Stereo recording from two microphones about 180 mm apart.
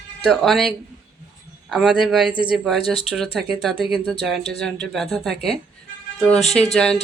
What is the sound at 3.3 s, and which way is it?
Speech, centre (ahead or behind).